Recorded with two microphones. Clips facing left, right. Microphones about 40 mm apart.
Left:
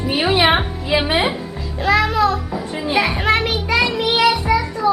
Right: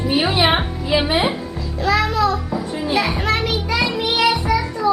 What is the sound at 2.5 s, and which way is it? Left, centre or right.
Children playing, centre.